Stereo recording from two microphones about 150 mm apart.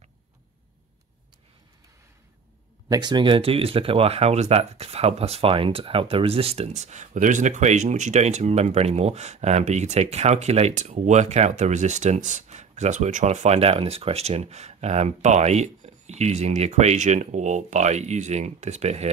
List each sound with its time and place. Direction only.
2.9 s speech: 30° right (ahead or behind); by 19.0 s 50° right (ahead or behind)